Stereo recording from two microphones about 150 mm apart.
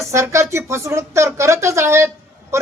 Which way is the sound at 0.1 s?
20° right (ahead or behind).